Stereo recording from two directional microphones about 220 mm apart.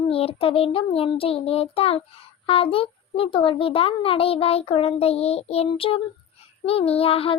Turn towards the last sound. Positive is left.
turn(degrees=25)  # may be behind; listen again after turning